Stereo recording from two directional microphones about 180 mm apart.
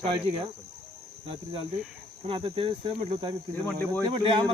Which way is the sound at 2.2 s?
30° right (ahead or behind).